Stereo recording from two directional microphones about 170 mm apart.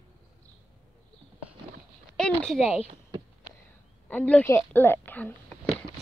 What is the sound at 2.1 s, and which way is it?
Speech, 5° left (ahead or behind).